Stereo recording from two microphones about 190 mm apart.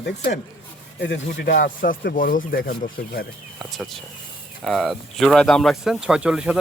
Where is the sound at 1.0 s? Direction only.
60° left (ahead or behind).